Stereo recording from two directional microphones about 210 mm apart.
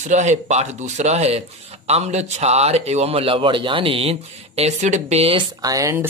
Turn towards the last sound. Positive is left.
turn(degrees=-15)  # may be behind; listen again after turning